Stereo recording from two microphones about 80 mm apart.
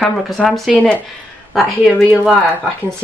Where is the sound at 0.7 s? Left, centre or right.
Centre.